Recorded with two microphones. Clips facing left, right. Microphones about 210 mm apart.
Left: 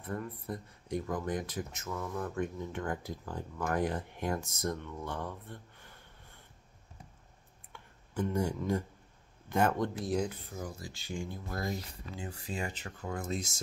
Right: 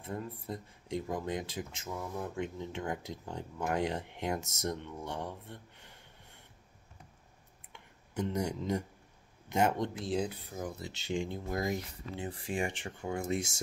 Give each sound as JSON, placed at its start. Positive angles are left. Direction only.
{"t": 0.0, "sound": "speech", "side_deg": -25}
{"t": 7.7, "sound": "a sound", "side_deg": -20}
{"t": 9.5, "sound": "speech", "side_deg": -20}
{"t": 12.3, "sound": "speech", "side_deg": -30}